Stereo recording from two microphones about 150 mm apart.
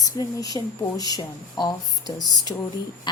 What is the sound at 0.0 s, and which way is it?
A woman's voice, 25° left (ahead or behind).